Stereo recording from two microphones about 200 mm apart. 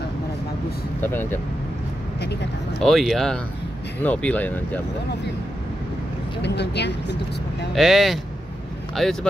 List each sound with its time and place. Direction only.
1.0 s speech: 10° left (ahead or behind)
2.8 s speech: centre (ahead or behind)
6.4 s speech: 60° left (ahead or behind)
7.7 s speech: centre (ahead or behind)